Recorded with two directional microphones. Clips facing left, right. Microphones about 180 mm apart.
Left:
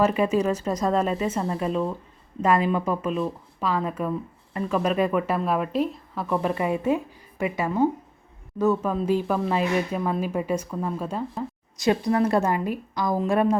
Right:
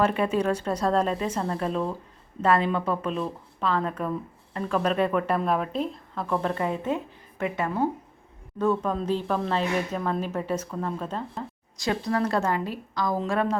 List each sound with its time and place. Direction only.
0.0 s speech: 5° left (ahead or behind)